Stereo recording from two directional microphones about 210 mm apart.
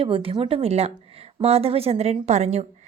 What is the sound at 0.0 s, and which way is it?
A woman's voice, 25° right (ahead or behind).